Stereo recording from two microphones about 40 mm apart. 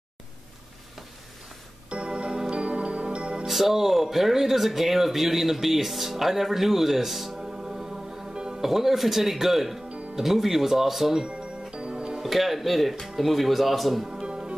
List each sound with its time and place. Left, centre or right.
1.9 s music: right
3.4 s speech: centre
11.2 s music: right
12.2 s speech: centre
14.0 s music: right